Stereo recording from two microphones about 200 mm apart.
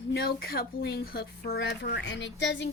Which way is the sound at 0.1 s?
50° left (ahead or behind).